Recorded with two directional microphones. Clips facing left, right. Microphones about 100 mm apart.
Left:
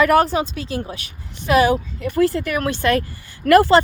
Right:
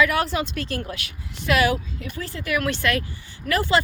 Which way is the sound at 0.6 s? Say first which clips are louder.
Left 2 dB; 15° left (ahead or behind).